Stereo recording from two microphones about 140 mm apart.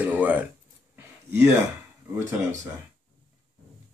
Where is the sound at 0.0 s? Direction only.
10° right (ahead or behind).